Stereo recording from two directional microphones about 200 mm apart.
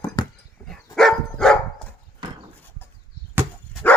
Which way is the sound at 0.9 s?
Centre (ahead or behind).